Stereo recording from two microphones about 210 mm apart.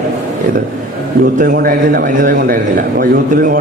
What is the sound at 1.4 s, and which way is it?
A man's voice, 45° right (ahead or behind).